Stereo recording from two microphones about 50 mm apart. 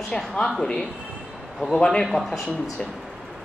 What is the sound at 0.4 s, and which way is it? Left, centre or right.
Speech, centre.